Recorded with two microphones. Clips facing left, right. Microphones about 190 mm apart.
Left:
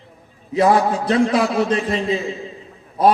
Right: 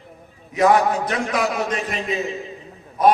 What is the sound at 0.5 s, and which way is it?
A man's voice, 30° left (ahead or behind).